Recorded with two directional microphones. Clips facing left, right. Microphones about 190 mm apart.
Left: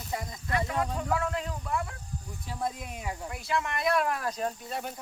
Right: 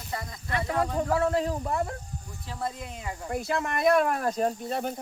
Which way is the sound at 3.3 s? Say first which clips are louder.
Right 5 dB; 45° right (ahead or behind).